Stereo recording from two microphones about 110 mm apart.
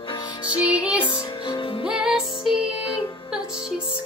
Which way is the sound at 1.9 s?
5° right (ahead or behind).